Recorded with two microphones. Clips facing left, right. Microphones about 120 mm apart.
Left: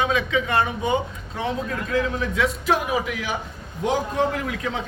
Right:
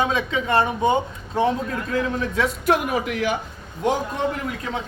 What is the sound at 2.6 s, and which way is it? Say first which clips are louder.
Speech: right 1 dB; 55° right (ahead or behind).